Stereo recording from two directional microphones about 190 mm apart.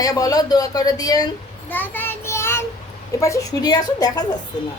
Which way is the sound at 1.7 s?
10° left (ahead or behind).